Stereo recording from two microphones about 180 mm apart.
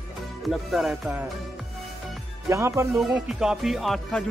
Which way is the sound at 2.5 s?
15° right (ahead or behind).